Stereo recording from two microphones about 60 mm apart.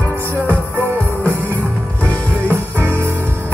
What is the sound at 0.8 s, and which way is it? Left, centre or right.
Music, right.